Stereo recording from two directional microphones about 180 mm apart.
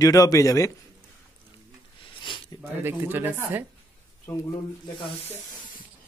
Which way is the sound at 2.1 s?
25° left (ahead or behind).